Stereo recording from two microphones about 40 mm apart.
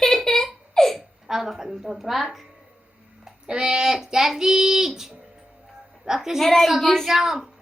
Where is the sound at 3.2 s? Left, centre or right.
Right.